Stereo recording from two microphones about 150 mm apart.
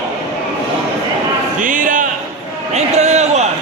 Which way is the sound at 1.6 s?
60° right (ahead or behind).